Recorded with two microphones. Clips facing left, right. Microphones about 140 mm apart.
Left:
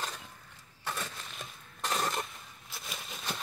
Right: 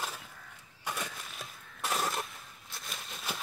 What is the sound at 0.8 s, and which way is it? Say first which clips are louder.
Crushing: even; 10° right (ahead or behind).